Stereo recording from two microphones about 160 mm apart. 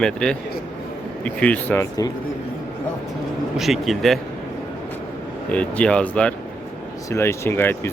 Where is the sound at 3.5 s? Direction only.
Centre (ahead or behind).